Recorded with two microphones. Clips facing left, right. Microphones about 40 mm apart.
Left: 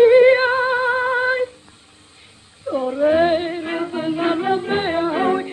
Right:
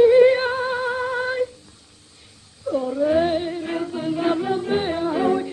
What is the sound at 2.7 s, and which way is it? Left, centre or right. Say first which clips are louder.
Music: left 3 dB; left.